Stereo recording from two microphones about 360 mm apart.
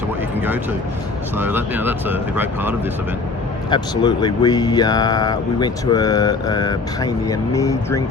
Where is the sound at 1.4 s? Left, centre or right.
Centre.